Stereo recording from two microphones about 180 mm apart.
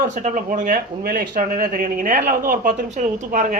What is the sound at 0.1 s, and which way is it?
Speech, 45° right (ahead or behind).